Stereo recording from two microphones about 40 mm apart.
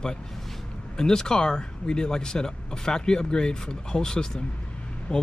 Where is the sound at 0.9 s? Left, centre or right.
Centre.